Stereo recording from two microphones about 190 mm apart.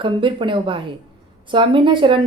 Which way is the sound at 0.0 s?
25° right (ahead or behind).